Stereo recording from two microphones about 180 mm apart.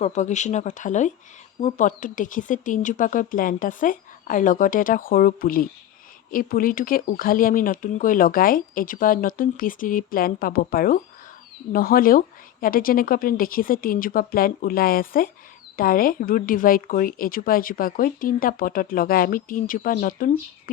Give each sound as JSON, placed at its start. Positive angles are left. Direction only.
{"t": 0.0, "sound": "speech", "side_deg": 40}